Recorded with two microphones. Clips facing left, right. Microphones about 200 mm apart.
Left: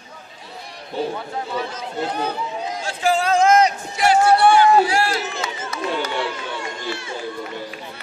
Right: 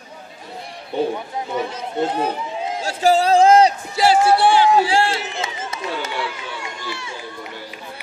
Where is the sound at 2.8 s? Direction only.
40° right (ahead or behind).